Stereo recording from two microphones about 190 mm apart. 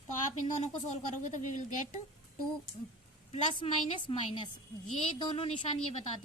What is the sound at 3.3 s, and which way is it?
A woman's voice, 30° left (ahead or behind).